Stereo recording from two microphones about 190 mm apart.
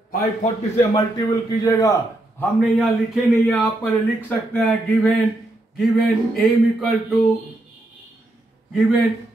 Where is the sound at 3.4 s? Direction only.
5° left (ahead or behind).